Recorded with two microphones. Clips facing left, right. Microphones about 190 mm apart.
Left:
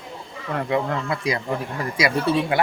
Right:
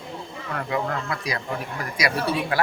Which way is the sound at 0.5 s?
25° left (ahead or behind).